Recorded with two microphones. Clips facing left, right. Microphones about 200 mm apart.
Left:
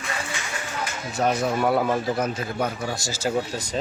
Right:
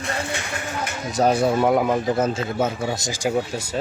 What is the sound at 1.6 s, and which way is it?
A man's voice, 15° right (ahead or behind).